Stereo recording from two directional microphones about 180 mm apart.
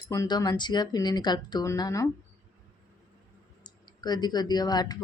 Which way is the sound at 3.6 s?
25° left (ahead or behind).